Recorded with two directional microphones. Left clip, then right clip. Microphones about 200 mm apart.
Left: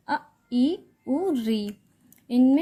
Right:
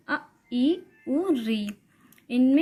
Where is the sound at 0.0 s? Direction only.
30° left (ahead or behind).